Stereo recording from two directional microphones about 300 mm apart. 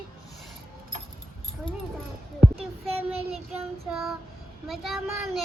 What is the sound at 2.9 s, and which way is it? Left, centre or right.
Child singing, centre.